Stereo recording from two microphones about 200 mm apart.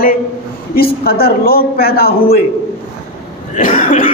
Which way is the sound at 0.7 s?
50° left (ahead or behind).